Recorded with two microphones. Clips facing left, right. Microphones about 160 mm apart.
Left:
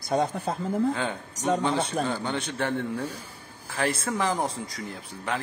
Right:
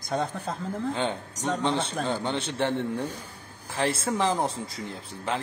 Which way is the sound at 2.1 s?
30° right (ahead or behind).